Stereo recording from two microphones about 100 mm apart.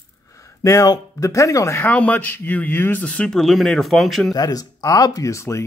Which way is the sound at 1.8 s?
15° left (ahead or behind).